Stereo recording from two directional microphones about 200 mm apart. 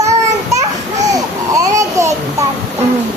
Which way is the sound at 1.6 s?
15° right (ahead or behind).